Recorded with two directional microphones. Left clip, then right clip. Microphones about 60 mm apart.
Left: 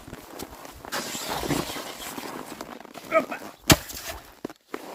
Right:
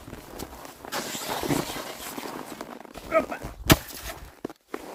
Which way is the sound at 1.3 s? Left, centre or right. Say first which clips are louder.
Right 1 dB; right.